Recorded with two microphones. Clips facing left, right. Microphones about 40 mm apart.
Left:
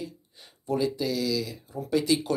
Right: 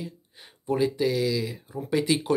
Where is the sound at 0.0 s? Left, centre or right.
Right.